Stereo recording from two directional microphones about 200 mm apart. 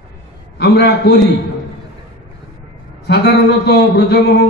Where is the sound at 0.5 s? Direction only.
55° left (ahead or behind).